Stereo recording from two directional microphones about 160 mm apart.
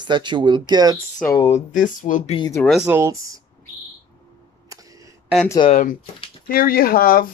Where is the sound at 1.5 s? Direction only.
55° left (ahead or behind).